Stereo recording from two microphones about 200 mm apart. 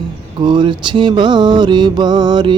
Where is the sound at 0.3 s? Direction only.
20° right (ahead or behind).